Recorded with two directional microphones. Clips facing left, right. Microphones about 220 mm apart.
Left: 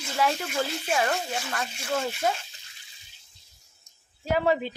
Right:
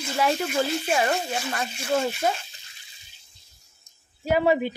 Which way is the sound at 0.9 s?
15° right (ahead or behind).